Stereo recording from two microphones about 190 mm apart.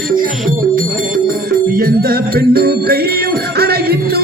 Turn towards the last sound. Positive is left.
turn(degrees=-55)  # may be behind; listen again after turning